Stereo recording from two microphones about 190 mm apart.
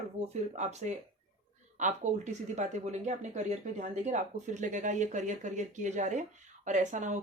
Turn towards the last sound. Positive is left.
turn(degrees=-40)  # may be behind; listen again after turning